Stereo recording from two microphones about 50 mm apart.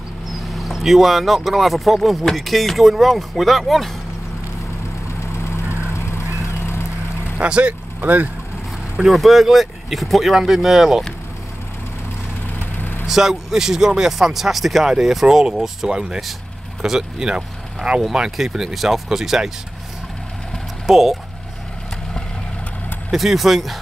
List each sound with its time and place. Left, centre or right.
0.6 s speech: centre
5.7 s vehicle: left
7.3 s speech: right
8.0 s speech: right
8.9 s speech: centre
13.0 s speech: centre
20.8 s speech: centre
23.1 s speech: centre